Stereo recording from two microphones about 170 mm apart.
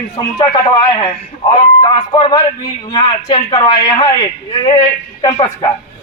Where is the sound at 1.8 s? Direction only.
30° left (ahead or behind).